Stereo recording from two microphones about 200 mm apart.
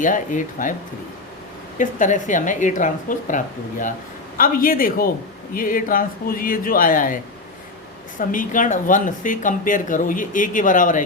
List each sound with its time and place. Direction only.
0.0 s speech: 40° left (ahead or behind)
1.8 s speech: 40° left (ahead or behind)
8.3 s speech: 40° left (ahead or behind)